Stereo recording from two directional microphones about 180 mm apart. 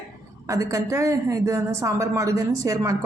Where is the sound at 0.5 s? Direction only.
20° right (ahead or behind).